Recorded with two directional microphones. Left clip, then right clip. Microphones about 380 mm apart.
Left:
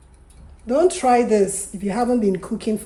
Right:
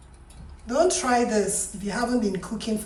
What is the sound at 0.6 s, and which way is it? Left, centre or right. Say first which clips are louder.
A woman's voice: left 5 dB; centre.